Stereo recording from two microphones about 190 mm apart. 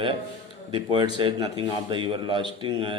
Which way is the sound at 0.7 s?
25° right (ahead or behind).